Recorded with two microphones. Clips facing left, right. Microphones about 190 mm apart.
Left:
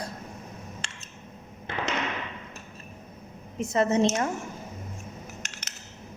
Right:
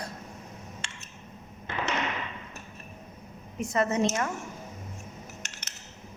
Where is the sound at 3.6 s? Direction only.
25° left (ahead or behind).